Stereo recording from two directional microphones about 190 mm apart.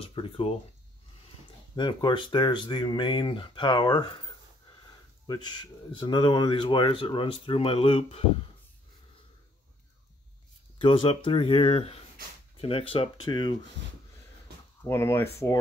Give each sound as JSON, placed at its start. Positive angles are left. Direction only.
{"t": 0.0, "sound": "speech", "side_deg": 30}
{"t": 1.8, "sound": "speech", "side_deg": 25}
{"t": 5.2, "sound": "speech", "side_deg": 20}
{"t": 10.8, "sound": "speech", "side_deg": 25}
{"t": 14.8, "sound": "speech", "side_deg": 15}